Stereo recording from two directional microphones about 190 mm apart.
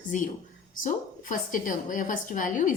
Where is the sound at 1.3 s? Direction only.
45° left (ahead or behind).